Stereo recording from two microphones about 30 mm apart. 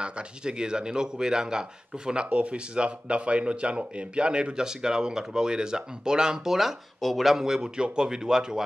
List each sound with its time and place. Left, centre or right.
0.0 s speech: right
2.2 s speech: right
4.6 s speech: right
7.0 s speech: centre
7.3 s speech: centre